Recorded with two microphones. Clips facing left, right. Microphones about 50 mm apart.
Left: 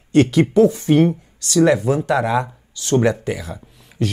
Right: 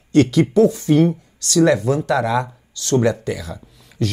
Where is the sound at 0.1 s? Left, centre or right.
Left.